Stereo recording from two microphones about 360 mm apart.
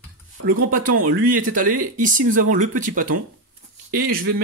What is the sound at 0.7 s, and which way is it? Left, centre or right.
Speech, right.